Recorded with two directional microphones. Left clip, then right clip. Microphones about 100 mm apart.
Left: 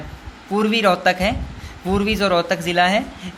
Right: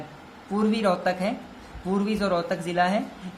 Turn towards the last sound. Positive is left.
turn(degrees=25)  # may be behind; listen again after turning